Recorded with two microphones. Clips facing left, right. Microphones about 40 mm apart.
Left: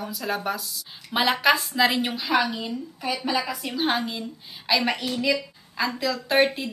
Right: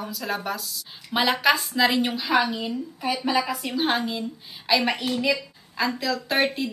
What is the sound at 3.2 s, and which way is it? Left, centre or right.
Speech, centre.